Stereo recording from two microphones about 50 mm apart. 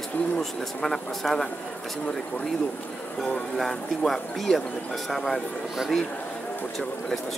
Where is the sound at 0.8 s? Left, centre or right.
Centre.